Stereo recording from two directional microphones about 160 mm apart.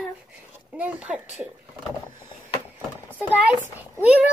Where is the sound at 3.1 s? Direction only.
10° right (ahead or behind).